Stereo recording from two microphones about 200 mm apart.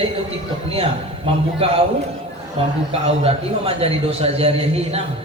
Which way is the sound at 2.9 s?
30° right (ahead or behind).